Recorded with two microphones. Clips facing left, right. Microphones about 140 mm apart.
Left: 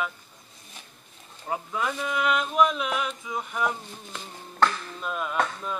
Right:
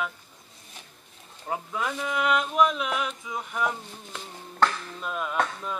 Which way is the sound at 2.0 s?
50° right (ahead or behind).